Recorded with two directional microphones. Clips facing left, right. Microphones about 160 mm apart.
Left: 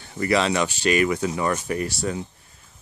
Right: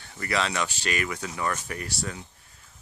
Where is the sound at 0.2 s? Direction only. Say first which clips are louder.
Left 7 dB; 20° left (ahead or behind).